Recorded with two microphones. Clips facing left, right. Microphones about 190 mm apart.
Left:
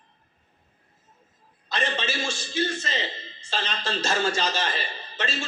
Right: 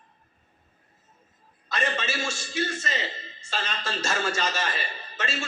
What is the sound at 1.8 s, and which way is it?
A man's voice, 30° left (ahead or behind).